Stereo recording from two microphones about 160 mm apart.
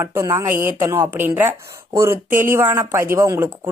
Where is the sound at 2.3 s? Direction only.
60° right (ahead or behind).